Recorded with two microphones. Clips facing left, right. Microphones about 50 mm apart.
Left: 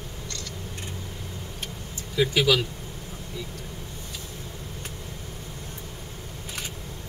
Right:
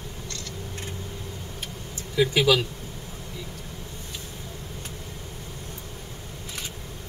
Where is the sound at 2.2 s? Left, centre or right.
Right.